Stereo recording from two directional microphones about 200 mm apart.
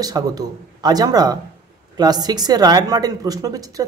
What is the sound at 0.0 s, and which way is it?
Speech, 20° right (ahead or behind).